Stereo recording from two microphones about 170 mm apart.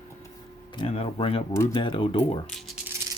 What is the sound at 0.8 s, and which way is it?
Speech, 30° left (ahead or behind).